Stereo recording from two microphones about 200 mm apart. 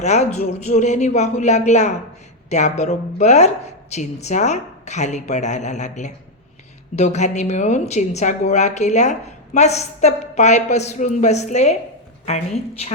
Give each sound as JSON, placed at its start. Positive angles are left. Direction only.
{"t": 0.0, "sound": "a woman's voice", "side_deg": 35}